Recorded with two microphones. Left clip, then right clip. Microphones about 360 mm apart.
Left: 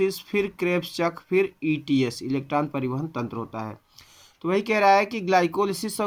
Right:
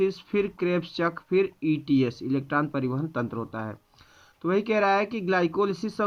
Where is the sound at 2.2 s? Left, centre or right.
Centre.